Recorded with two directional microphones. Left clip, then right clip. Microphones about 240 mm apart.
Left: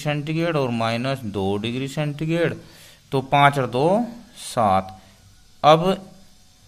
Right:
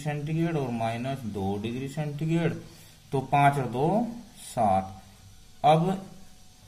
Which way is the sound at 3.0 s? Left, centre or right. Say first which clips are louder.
Left 6 dB; left.